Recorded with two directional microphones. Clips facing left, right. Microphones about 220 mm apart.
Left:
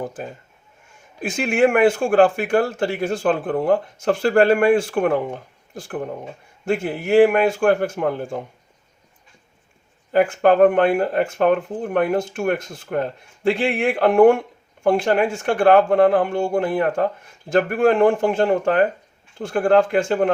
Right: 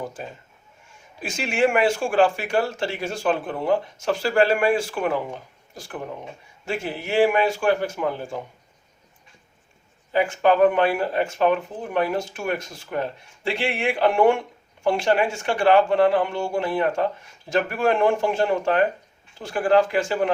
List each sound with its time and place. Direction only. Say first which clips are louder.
1.2 s a man's voice: left 4 dB; 50° left (ahead or behind)
10.1 s a man's voice: left 4 dB; 50° left (ahead or behind)